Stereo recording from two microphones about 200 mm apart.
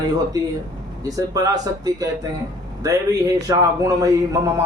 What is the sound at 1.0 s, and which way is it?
Speech, 15° right (ahead or behind).